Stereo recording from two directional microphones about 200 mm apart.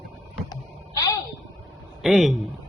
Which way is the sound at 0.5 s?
15° left (ahead or behind).